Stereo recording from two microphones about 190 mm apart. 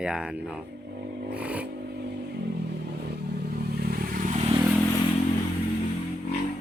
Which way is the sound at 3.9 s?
50° right (ahead or behind).